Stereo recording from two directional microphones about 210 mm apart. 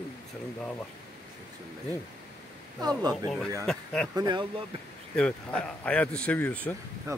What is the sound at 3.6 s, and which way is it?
Speech, centre (ahead or behind).